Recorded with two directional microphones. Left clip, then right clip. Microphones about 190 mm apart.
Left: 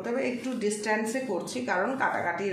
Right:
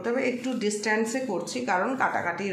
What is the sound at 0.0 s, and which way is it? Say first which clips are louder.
A woman's voice: right 3 dB; 35° right (ahead or behind).